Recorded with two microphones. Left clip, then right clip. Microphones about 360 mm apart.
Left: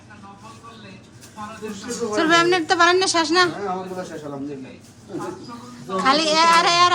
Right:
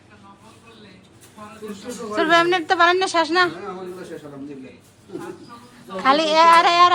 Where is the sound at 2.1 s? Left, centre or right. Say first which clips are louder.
Even; centre.